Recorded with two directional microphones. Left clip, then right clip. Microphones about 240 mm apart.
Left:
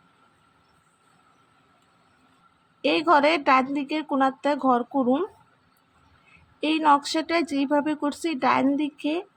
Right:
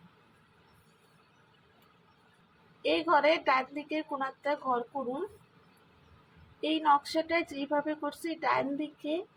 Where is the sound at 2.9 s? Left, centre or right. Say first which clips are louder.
Left 6 dB; left.